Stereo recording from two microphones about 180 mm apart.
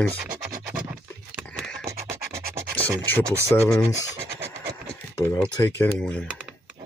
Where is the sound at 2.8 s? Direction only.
15° right (ahead or behind).